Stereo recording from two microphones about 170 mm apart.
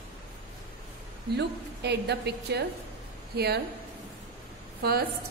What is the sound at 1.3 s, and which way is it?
A woman's voice, 80° right.